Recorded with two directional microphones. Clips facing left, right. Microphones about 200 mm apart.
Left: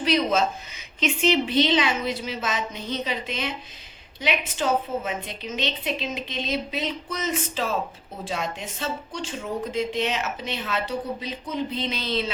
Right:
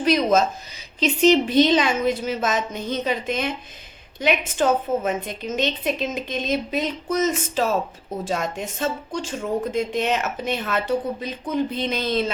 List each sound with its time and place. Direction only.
0.0 s a woman's voice: 45° right (ahead or behind)